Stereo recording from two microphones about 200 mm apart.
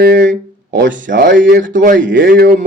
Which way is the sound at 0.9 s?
40° right (ahead or behind).